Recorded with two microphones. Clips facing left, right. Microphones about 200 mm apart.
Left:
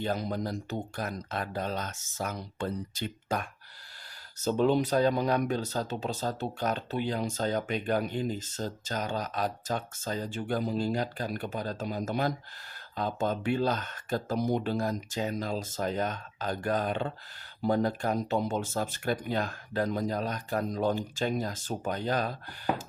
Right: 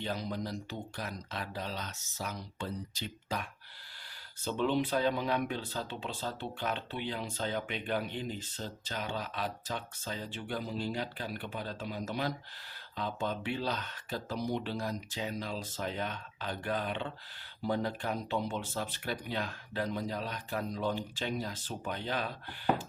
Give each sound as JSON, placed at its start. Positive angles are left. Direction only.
{"t": 0.0, "sound": "speech", "side_deg": 50}